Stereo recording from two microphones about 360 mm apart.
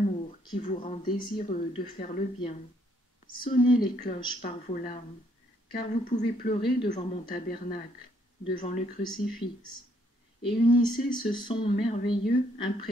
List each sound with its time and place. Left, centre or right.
0.3 s speech: centre